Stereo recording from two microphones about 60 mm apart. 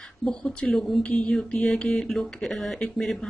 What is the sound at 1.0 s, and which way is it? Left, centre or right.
Speech, centre.